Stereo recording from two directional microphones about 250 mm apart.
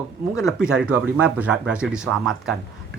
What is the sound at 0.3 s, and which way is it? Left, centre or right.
Speech, centre.